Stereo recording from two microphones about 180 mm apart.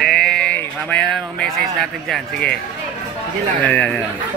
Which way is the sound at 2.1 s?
5° left (ahead or behind).